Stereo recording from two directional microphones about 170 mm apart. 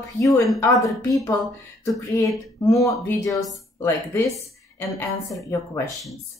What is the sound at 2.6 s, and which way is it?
Speech, 20° left (ahead or behind).